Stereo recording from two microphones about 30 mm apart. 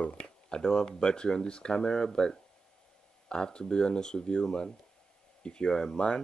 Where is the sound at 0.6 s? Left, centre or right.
Left.